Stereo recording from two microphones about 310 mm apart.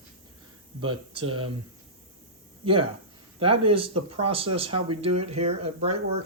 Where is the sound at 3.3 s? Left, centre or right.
Centre.